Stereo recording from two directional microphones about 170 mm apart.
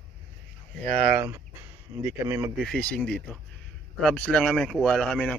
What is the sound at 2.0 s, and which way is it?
Speech, 15° right (ahead or behind).